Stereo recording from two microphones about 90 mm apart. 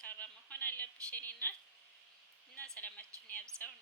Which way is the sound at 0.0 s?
15° left (ahead or behind).